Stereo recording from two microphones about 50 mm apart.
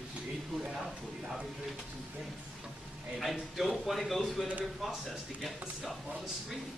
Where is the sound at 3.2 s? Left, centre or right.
Centre.